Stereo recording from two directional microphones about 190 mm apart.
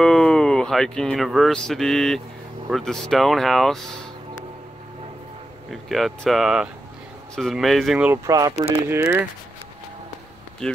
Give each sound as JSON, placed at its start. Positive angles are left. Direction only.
{"t": 0.0, "sound": "speech", "side_deg": 5}
{"t": 5.7, "sound": "speech", "side_deg": 0}
{"t": 8.3, "sound": "speech", "side_deg": -20}
{"t": 10.6, "sound": "speech", "side_deg": 5}